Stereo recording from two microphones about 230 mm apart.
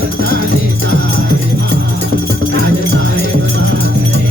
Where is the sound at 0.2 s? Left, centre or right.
Left.